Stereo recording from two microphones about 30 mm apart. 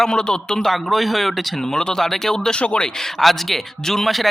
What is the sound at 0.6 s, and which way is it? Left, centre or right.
Speech, centre.